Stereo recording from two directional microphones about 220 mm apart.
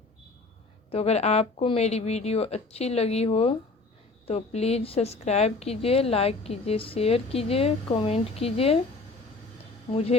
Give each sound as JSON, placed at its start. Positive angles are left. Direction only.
{"t": 0.9, "sound": "a woman's voice", "side_deg": 30}
{"t": 9.9, "sound": "a woman's voice", "side_deg": 30}